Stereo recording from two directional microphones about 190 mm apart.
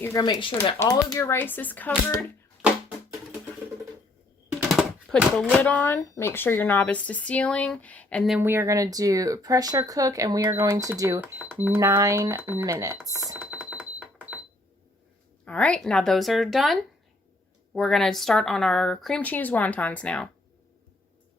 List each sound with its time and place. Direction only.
0.0 s speech: 15° left (ahead or behind)
4.7 s speech: centre (ahead or behind)
8.4 s speech: 15° right (ahead or behind)
13.3 s alarm: 5° right (ahead or behind)
15.4 s speech: 5° left (ahead or behind)